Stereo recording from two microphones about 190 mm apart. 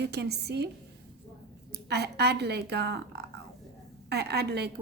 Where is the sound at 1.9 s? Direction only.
60° right (ahead or behind).